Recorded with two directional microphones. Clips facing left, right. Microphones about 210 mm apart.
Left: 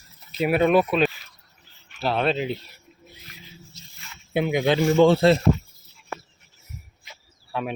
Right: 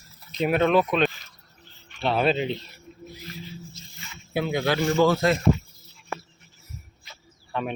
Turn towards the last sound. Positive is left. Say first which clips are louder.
# even
turn(degrees=5)  # may be behind; listen again after turning